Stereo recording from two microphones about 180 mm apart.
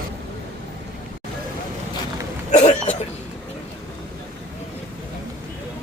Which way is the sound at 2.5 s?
40° left (ahead or behind).